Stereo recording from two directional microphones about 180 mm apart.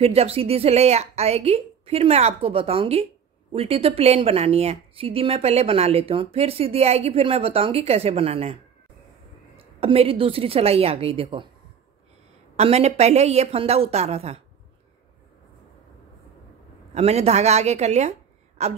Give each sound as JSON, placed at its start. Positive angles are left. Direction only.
{"t": 0.0, "sound": "a woman's voice", "side_deg": -35}
{"t": 9.6, "sound": "a woman's voice", "side_deg": -30}
{"t": 12.5, "sound": "a woman's voice", "side_deg": -35}
{"t": 16.9, "sound": "a woman's voice", "side_deg": -35}